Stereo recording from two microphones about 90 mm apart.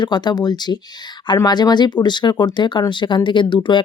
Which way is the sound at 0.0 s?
55° left (ahead or behind).